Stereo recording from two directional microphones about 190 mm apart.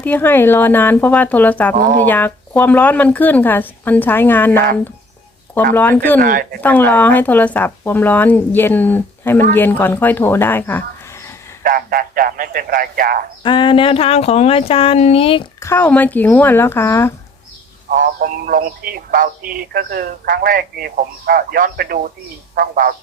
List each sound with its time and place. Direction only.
0.0 s speech: 10° left (ahead or behind)
1.7 s speech: 40° right (ahead or behind)
2.0 s speech: 10° left (ahead or behind)
5.7 s speech: 10° left (ahead or behind)
6.1 s speech: 45° right (ahead or behind)
6.6 s speech: 10° left (ahead or behind)
11.6 s speech: 50° right (ahead or behind)
13.4 s speech: 25° left (ahead or behind)
15.6 s speech: 10° left (ahead or behind)
17.8 s speech: 45° right (ahead or behind)